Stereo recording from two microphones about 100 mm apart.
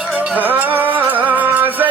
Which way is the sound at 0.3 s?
15° right (ahead or behind).